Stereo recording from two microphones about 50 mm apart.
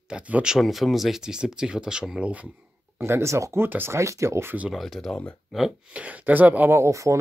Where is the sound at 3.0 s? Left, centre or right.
Right.